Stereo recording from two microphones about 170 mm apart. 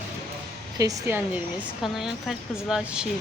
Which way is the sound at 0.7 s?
20° right (ahead or behind).